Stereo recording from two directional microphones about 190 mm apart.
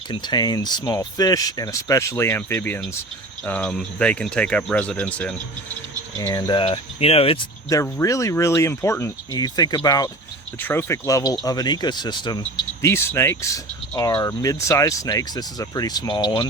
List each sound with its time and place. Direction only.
0.1 s speech: 25° left (ahead or behind); by 5.3 s 5° left (ahead or behind)
6.1 s speech: 20° left (ahead or behind)
7.7 s speech: 15° left (ahead or behind)